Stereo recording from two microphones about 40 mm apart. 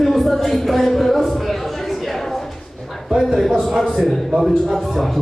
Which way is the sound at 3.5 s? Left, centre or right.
Centre.